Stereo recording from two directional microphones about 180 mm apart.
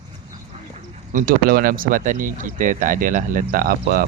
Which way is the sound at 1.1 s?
50° right (ahead or behind).